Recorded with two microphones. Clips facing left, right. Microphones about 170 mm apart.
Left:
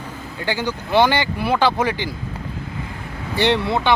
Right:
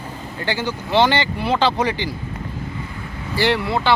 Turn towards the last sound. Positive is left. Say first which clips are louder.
# left 1 dB
turn(degrees=20)  # may be behind; listen again after turning